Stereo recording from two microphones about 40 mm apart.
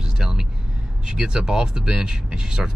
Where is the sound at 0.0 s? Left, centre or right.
Centre.